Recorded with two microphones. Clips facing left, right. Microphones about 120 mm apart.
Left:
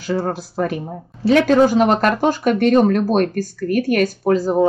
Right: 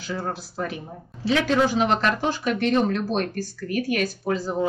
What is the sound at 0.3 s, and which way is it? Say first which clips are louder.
Speech: left 8 dB; 45° left (ahead or behind).